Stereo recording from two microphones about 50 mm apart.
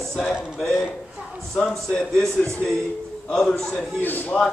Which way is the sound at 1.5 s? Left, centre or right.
Centre.